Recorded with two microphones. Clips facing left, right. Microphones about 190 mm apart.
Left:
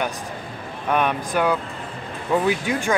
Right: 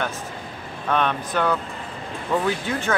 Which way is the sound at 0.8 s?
10° left (ahead or behind).